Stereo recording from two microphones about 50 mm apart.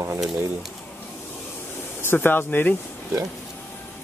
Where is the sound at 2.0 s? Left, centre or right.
Left.